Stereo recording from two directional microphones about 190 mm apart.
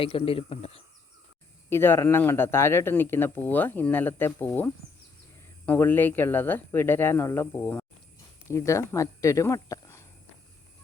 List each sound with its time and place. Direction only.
0.0 s a man's voice: 30° left (ahead or behind)
1.7 s speech: 10° left (ahead or behind)